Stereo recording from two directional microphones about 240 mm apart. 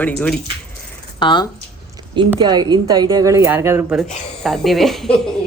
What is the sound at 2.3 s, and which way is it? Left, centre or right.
Speech, centre.